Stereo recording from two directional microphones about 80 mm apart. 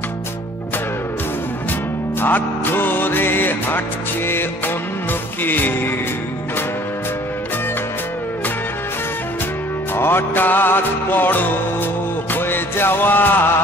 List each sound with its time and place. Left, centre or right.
2.2 s music: left
5.4 s music: left
9.9 s music: left